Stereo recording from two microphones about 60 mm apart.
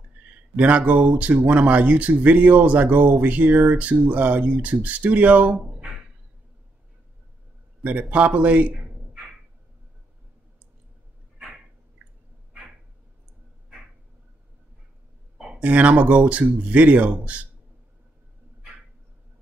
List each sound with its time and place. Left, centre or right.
0.6 s speech: right
7.8 s a man's voice: right
15.6 s speech: right